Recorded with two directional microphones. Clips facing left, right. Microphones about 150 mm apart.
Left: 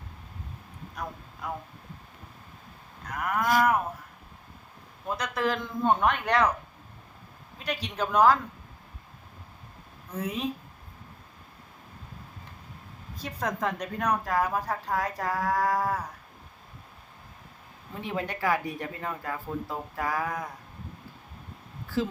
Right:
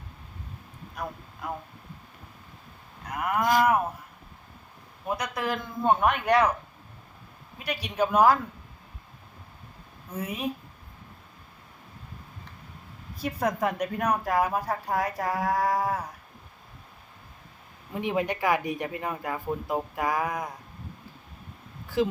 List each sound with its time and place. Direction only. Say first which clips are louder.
1.0 s speech: right 2 dB; 5° right (ahead or behind)
3.1 s a woman's voice: right 2 dB; 10° right (ahead or behind)
5.0 s a woman's voice: left 1 dB; 10° right (ahead or behind)
7.6 s a woman's voice: right 4 dB; 10° right (ahead or behind)
10.2 s a woman's voice: even; 10° right (ahead or behind)
13.1 s a woman's voice: right 4 dB; 10° right (ahead or behind)
18.0 s a woman's voice: right 3 dB; 15° right (ahead or behind)
22.0 s a woman's voice: right 4 dB; 15° right (ahead or behind)